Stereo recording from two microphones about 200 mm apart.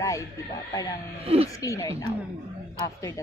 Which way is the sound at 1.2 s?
30° right (ahead or behind).